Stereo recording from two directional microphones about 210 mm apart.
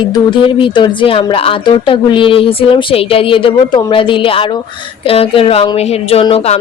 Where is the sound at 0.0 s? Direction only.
20° left (ahead or behind).